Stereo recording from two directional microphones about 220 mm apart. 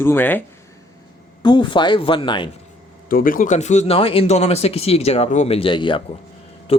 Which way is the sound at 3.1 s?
40° left (ahead or behind).